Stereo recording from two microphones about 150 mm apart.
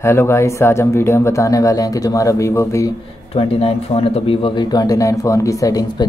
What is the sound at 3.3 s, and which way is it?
Speech, 40° left (ahead or behind).